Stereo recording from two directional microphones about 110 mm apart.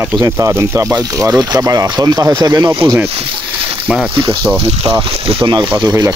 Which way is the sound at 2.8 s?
25° right (ahead or behind).